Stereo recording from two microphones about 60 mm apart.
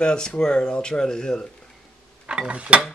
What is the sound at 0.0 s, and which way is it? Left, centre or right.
Speech, centre.